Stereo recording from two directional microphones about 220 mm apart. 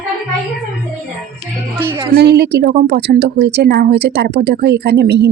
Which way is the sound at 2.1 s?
50° right (ahead or behind).